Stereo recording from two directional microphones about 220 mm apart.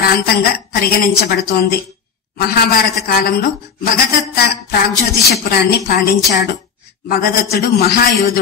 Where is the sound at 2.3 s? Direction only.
45° left (ahead or behind).